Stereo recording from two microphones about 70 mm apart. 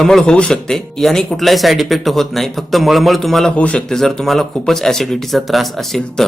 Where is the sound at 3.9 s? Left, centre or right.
Centre.